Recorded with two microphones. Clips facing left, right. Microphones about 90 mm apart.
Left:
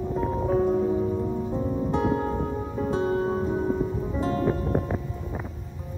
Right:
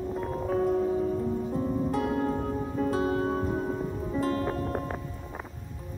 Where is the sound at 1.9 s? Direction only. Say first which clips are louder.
Left 3 dB; 30° left (ahead or behind).